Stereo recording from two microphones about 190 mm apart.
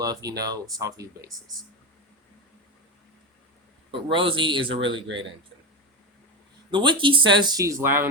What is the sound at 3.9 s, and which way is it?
Speech, 25° right (ahead or behind).